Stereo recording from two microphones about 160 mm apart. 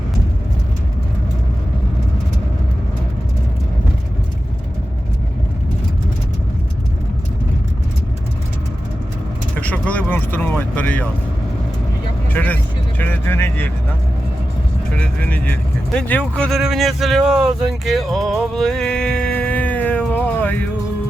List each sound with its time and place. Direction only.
9.6 s vehicle: 10° left (ahead or behind)
12.3 s vehicle: 10° left (ahead or behind)
14.9 s vehicle: 10° left (ahead or behind)